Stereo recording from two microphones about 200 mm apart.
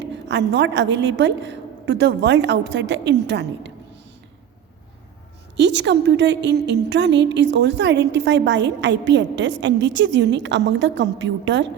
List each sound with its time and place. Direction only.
0.0 s a woman's voice: 60° right (ahead or behind)
5.5 s a woman's voice: 60° right (ahead or behind)